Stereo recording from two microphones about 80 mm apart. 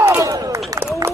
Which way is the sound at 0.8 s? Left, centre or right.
Right.